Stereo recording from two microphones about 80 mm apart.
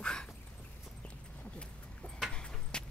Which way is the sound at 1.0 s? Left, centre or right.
Centre.